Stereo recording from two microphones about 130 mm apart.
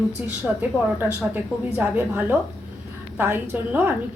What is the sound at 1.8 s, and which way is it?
Speech, 15° right (ahead or behind).